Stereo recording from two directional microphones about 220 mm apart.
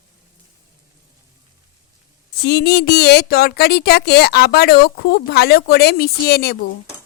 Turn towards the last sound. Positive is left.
turn(degrees=45)  # may be behind; listen again after turning